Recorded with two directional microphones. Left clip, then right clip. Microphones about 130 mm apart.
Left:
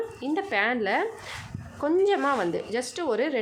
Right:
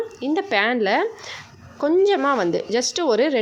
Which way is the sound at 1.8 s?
30° right (ahead or behind).